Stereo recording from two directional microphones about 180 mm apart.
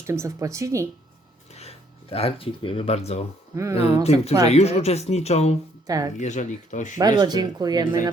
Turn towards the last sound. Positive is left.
turn(degrees=-20)  # may be behind; listen again after turning